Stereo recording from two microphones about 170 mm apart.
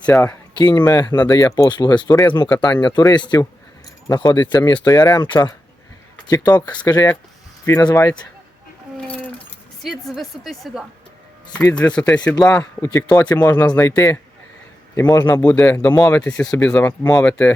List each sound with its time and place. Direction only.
0.0 s speech: 10° left (ahead or behind)
0.5 s speech: 25° left (ahead or behind)
9.8 s a woman's voice: centre (ahead or behind)
12.8 s speech: 15° left (ahead or behind)